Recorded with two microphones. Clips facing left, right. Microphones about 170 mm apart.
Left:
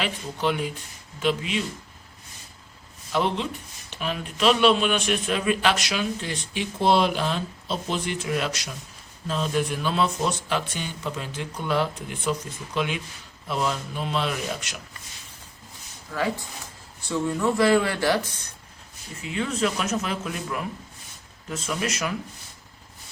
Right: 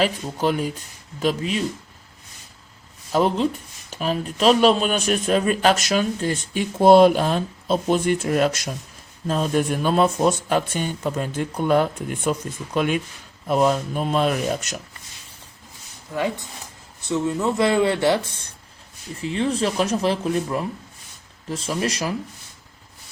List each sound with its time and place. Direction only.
0.0 s speech: 40° right (ahead or behind)
3.1 s speech: 40° right (ahead or behind)
16.1 s speech: 20° right (ahead or behind)